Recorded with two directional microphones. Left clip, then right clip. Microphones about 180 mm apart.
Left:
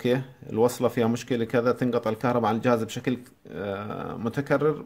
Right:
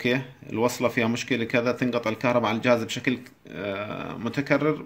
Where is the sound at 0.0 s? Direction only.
50° left (ahead or behind).